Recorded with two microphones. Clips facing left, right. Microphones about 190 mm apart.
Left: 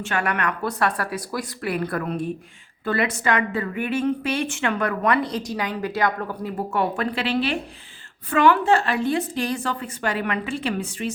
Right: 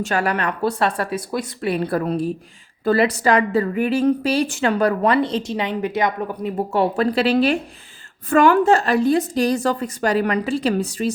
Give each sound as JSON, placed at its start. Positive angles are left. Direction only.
{"t": 0.0, "sound": "a woman's voice", "side_deg": -35}
{"t": 6.7, "sound": "a woman's voice", "side_deg": -35}